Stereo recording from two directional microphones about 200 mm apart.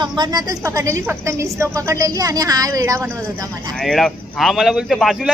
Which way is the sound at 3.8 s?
Centre (ahead or behind).